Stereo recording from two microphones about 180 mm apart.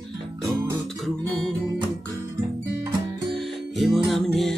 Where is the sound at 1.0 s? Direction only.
Centre (ahead or behind).